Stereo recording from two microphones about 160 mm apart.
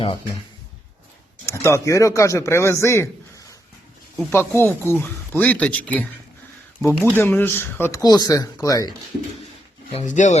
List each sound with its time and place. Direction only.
1.5 s speech: 15° left (ahead or behind)
4.3 s speech: 15° left (ahead or behind)
9.9 s speech: 50° left (ahead or behind)